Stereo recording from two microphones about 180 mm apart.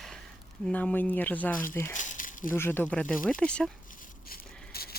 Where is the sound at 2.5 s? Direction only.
10° left (ahead or behind).